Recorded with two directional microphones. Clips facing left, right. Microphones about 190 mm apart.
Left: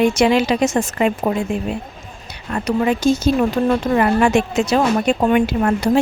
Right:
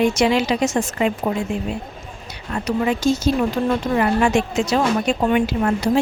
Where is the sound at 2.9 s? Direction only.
55° left (ahead or behind).